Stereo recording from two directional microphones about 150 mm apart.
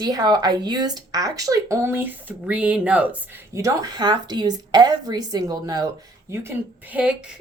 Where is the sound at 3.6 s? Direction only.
25° right (ahead or behind).